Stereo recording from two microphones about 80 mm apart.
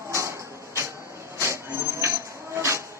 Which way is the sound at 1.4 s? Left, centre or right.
Right.